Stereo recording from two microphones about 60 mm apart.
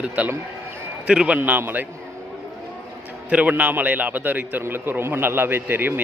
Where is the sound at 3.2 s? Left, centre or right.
Right.